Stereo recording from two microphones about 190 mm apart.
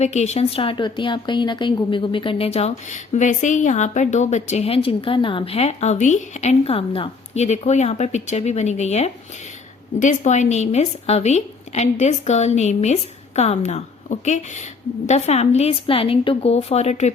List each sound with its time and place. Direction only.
0.0 s speech: 35° left (ahead or behind)